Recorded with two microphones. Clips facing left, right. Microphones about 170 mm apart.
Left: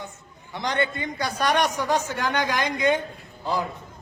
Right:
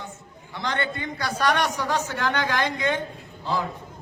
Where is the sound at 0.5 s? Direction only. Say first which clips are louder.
Left 2 dB; 15° left (ahead or behind).